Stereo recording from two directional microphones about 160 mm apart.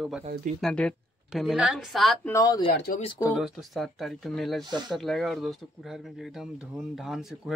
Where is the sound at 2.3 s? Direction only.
25° left (ahead or behind).